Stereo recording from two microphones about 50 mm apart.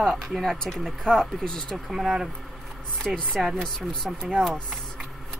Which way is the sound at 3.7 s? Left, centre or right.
Centre.